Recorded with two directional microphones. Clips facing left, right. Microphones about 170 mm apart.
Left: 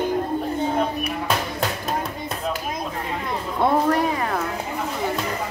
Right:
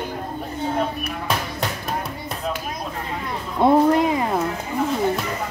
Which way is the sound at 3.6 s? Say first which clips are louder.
Right 4 dB; 20° right (ahead or behind).